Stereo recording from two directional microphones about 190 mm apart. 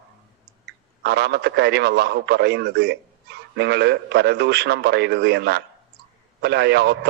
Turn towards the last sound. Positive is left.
turn(degrees=-60)  # may be behind; listen again after turning